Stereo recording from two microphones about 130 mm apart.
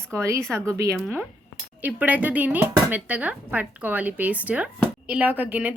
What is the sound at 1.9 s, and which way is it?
Speech, 10° right (ahead or behind).